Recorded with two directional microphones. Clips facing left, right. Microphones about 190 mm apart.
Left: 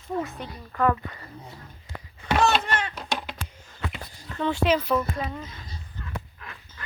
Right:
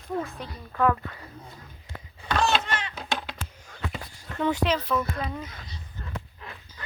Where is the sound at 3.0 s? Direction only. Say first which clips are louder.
Left 1 dB; 5° left (ahead or behind).